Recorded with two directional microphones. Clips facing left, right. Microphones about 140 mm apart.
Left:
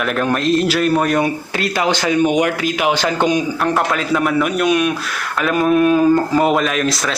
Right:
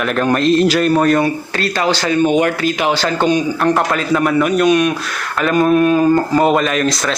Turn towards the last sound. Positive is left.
turn(degrees=5)  # may be behind; listen again after turning